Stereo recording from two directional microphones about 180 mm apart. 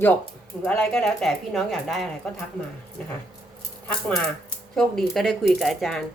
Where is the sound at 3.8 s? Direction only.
10° left (ahead or behind).